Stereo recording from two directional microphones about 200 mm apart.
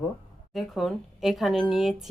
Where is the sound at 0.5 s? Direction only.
Centre (ahead or behind).